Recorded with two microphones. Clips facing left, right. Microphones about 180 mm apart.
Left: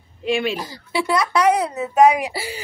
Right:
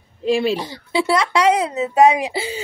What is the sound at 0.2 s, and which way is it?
A woman's voice, 35° right (ahead or behind).